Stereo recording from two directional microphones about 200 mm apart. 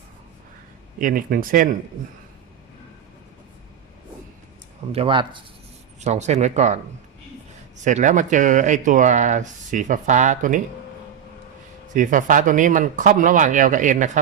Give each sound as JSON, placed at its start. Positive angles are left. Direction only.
{"t": 0.9, "sound": "speech", "side_deg": -45}
{"t": 4.9, "sound": "speech", "side_deg": -30}
{"t": 7.8, "sound": "speech", "side_deg": -35}
{"t": 11.9, "sound": "speech", "side_deg": -40}